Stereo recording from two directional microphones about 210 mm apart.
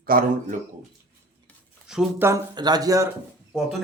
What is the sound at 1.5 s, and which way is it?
Speech, centre (ahead or behind).